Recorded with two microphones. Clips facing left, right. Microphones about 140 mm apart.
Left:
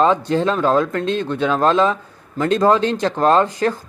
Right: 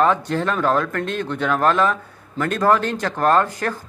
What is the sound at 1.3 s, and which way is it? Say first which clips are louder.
Speech: left 1 dB; 15° left (ahead or behind).